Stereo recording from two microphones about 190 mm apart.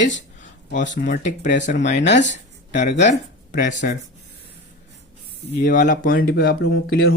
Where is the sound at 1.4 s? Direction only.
65° left (ahead or behind).